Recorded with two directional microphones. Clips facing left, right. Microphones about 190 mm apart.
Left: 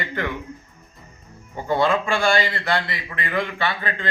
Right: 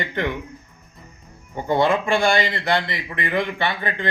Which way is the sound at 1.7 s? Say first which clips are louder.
Right 2 dB; 20° right (ahead or behind).